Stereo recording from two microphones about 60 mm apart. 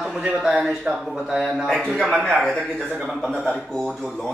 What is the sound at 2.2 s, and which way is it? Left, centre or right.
Speech, centre.